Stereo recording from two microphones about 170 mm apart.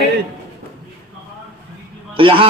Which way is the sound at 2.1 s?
30° right (ahead or behind).